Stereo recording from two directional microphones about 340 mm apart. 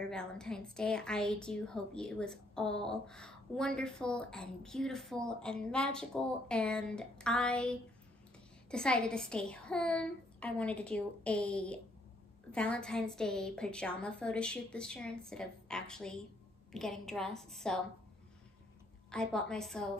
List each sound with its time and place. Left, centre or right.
0.0 s a woman's voice: centre
19.0 s a woman's voice: centre